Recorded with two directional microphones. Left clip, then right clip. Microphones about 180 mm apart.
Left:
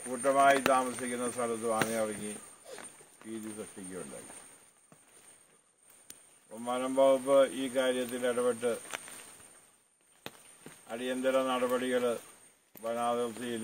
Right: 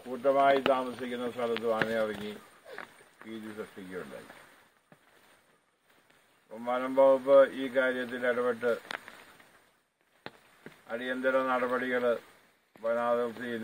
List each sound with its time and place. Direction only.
0.1 s a man's voice: 10° left (ahead or behind)
6.6 s a man's voice: 5° left (ahead or behind)
10.3 s run: 5° left (ahead or behind)
10.9 s speech: 30° left (ahead or behind)